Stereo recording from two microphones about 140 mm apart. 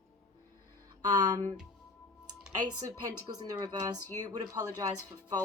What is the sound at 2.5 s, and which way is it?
A woman's voice, 25° right (ahead or behind).